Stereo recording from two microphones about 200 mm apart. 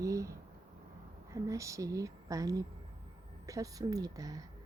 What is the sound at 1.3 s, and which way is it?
A woman's voice, 15° right (ahead or behind).